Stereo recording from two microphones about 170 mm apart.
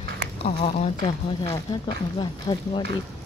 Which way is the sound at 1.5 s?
25° left (ahead or behind).